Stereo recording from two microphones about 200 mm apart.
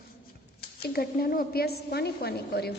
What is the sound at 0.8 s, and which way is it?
A woman's voice, 50° left (ahead or behind).